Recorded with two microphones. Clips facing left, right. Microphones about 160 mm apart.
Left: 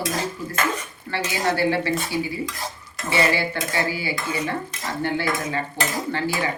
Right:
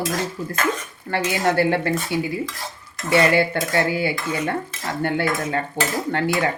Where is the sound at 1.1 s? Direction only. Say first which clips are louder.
Right 4 dB; 55° right (ahead or behind).